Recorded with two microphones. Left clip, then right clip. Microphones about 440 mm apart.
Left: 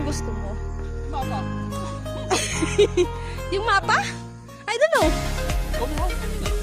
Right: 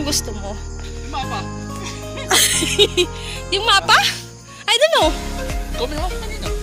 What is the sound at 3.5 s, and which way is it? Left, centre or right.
Speech, left.